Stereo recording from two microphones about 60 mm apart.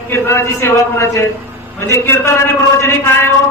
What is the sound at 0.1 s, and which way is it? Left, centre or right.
A man's voice, left.